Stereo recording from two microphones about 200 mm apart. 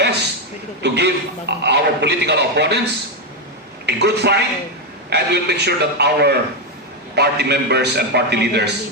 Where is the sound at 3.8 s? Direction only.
55° right (ahead or behind).